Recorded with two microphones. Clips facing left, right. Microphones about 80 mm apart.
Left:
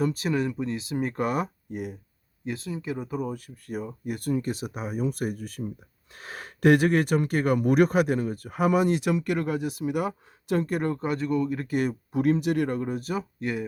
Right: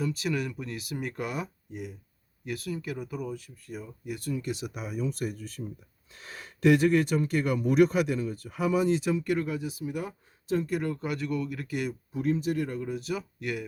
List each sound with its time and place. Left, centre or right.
0.0 s speech: left
1.1 s speech: left
2.4 s speech: left
10.7 s speech: left
12.1 s speech: left